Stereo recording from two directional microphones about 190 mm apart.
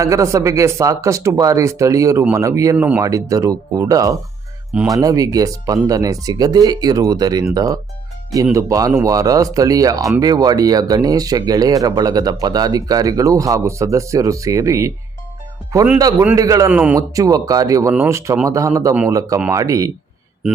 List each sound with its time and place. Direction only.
0.0 s speech: 15° right (ahead or behind)